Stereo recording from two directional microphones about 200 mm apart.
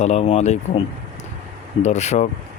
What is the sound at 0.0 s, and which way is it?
Speech, 35° left (ahead or behind).